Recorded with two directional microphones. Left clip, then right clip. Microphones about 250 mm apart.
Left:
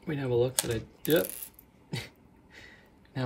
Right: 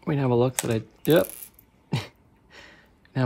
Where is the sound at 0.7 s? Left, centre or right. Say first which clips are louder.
Right 6 dB; right.